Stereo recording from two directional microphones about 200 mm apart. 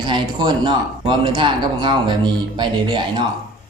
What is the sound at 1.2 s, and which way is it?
Speech, 20° right (ahead or behind).